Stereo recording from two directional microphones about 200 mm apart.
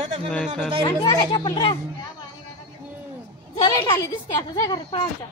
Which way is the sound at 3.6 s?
25° left (ahead or behind).